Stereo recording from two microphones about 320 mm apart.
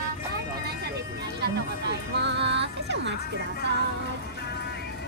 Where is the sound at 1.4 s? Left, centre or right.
Right.